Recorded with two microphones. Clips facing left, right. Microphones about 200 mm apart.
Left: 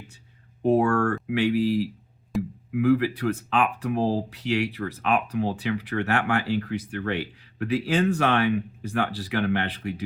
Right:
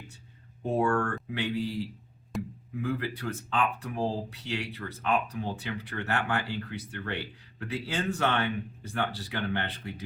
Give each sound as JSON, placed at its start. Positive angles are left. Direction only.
{"t": 0.6, "sound": "speech", "side_deg": 65}
{"t": 2.3, "sound": "music", "side_deg": 0}
{"t": 2.7, "sound": "speech", "side_deg": 75}